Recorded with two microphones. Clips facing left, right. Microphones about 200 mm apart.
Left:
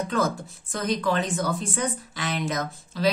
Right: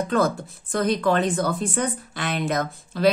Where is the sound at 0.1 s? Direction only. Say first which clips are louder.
Right 4 dB; 60° right (ahead or behind).